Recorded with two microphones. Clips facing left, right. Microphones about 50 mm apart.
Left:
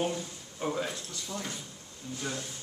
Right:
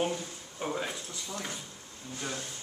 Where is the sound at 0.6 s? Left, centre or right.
Centre.